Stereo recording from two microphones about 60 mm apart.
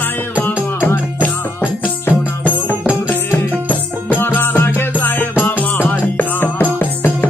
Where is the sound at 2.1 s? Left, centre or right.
Left.